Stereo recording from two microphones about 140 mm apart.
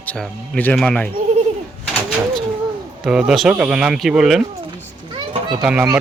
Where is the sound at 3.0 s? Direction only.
5° right (ahead or behind).